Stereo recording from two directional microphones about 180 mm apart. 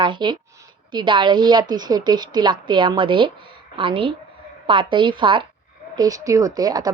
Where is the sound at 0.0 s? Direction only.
25° right (ahead or behind).